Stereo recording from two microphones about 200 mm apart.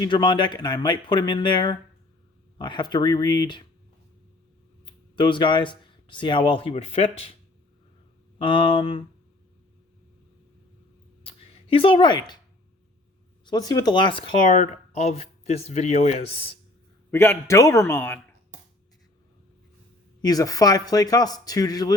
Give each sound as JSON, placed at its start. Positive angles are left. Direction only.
{"t": 0.0, "sound": "speech", "side_deg": 25}
{"t": 5.1, "sound": "speech", "side_deg": 25}
{"t": 8.4, "sound": "speech", "side_deg": 25}
{"t": 11.3, "sound": "a sound", "side_deg": 25}
{"t": 13.4, "sound": "speech", "side_deg": 20}
{"t": 14.4, "sound": "speech", "side_deg": 40}
{"t": 17.1, "sound": "a man's voice", "side_deg": 10}
{"t": 20.2, "sound": "speech", "side_deg": 20}